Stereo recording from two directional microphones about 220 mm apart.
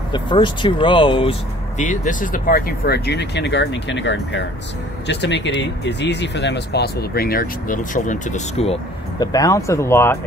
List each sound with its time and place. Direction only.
0.1 s speech: 20° left (ahead or behind)
1.8 s speech: 35° left (ahead or behind)
9.2 s speech: 15° left (ahead or behind)